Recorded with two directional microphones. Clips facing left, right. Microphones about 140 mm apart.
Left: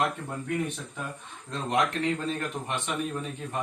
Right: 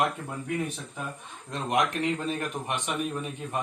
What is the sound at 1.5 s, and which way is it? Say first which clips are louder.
Speech: even; 20° right (ahead or behind).